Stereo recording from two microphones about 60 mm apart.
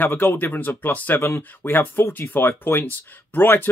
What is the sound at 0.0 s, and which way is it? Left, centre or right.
Speech, left.